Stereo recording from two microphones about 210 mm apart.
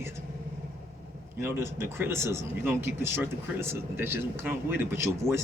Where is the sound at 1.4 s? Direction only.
10° right (ahead or behind).